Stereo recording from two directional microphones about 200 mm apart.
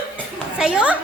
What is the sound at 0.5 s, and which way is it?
Speech, 5° right (ahead or behind).